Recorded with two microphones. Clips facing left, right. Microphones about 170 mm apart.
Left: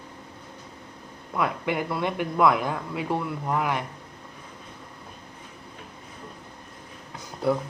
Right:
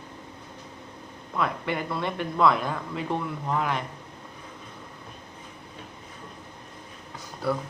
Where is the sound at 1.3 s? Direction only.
15° left (ahead or behind).